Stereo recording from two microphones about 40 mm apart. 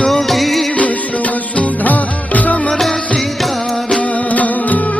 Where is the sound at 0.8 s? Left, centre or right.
Left.